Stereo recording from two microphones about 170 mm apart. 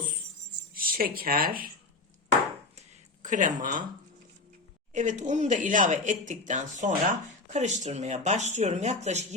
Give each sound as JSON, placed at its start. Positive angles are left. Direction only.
{"t": 0.7, "sound": "speech", "side_deg": -60}
{"t": 3.2, "sound": "speech", "side_deg": -50}
{"t": 4.9, "sound": "speech", "side_deg": -45}